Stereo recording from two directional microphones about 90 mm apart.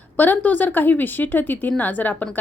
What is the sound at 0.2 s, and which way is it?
A woman's voice, 20° left (ahead or behind).